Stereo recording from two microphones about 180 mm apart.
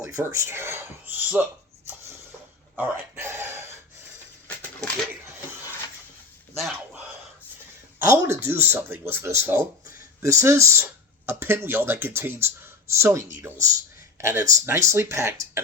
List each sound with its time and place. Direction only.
0.0 s speech: 15° right (ahead or behind)
2.7 s speech: 15° right (ahead or behind)
8.0 s speech: 15° right (ahead or behind)